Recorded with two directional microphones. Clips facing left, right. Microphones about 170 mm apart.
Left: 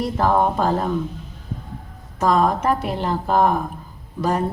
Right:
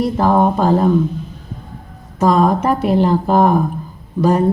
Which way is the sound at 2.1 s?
20° right (ahead or behind).